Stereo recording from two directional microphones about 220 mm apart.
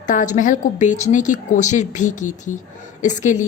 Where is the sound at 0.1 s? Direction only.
35° left (ahead or behind).